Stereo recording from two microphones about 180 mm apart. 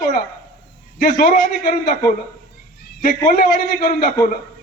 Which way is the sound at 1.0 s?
50° left (ahead or behind).